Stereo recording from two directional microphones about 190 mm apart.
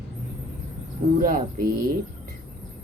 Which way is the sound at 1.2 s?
45° right (ahead or behind).